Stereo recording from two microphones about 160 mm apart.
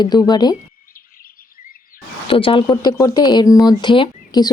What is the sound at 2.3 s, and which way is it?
Speech, 35° left (ahead or behind).